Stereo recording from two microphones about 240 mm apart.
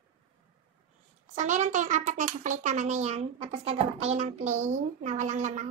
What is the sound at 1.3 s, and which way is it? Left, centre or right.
A child's voice, right.